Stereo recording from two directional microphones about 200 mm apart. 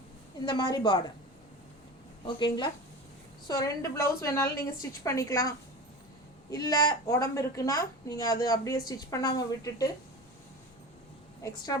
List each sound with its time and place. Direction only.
0.4 s a woman's voice: 20° left (ahead or behind)
2.2 s a woman's voice: 20° left (ahead or behind)
11.4 s a woman's voice: 20° left (ahead or behind)